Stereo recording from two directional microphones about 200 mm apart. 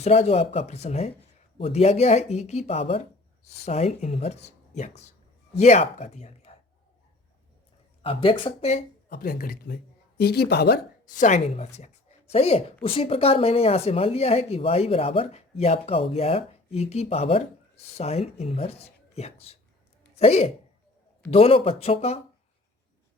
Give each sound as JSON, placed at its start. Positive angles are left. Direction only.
{"t": 0.0, "sound": "speech", "side_deg": 30}
{"t": 8.0, "sound": "speech", "side_deg": 25}
{"t": 9.0, "sound": "speech", "side_deg": 50}